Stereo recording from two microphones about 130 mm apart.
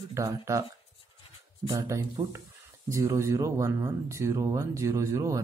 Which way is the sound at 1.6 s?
25° right (ahead or behind).